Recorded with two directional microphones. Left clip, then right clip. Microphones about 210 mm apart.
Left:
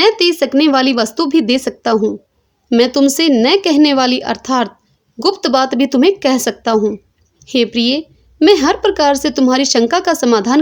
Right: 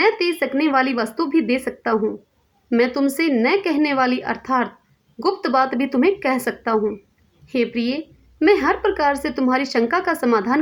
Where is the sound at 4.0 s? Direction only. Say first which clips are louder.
Left 5 dB; 60° left (ahead or behind).